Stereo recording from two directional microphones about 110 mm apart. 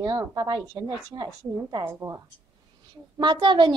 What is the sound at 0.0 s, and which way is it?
A woman's voice, 35° right (ahead or behind).